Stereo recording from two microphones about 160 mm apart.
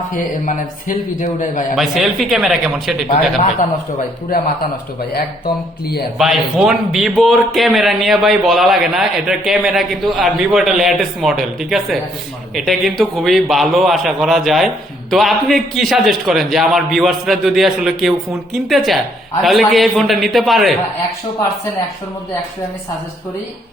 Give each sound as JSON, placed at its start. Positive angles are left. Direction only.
{"t": 0.4, "sound": "a man's voice", "side_deg": 50}
{"t": 1.7, "sound": "speech", "side_deg": 0}
{"t": 6.1, "sound": "speech", "side_deg": 0}